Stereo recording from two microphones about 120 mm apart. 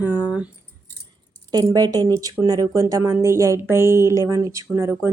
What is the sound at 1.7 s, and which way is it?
A woman's voice, 30° right (ahead or behind).